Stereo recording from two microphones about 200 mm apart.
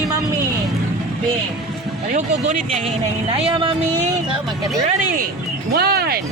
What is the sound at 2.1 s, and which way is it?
Speech, 40° right (ahead or behind).